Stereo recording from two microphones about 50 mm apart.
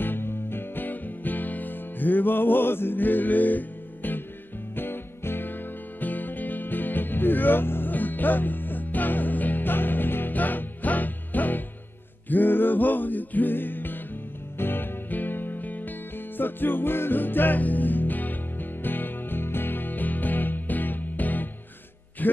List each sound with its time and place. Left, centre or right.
0.0 s music: left